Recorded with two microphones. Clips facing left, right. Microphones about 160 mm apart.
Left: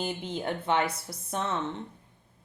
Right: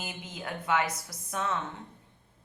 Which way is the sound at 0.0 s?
30° left (ahead or behind).